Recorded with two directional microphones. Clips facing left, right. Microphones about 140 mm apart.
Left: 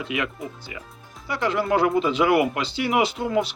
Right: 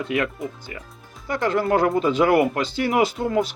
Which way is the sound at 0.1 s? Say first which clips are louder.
Right 4 dB; 45° right (ahead or behind).